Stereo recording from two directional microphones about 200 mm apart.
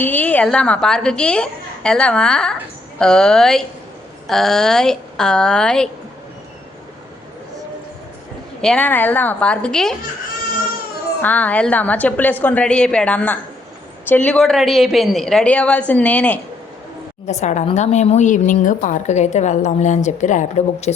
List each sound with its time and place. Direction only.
0.0 s a woman's voice: 10° left (ahead or behind)
8.6 s a woman's voice: 5° left (ahead or behind)
11.2 s a woman's voice: 10° left (ahead or behind)
17.2 s a woman's voice: 35° left (ahead or behind)